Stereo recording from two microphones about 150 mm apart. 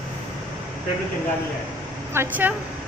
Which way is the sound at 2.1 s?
15° right (ahead or behind).